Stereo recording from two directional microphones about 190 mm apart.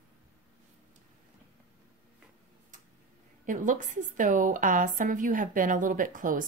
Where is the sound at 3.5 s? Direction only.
40° right (ahead or behind).